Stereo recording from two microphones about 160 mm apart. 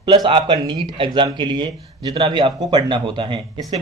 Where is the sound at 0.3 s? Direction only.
30° right (ahead or behind).